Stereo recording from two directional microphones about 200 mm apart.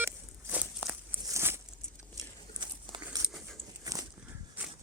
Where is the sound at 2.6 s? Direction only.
25° right (ahead or behind).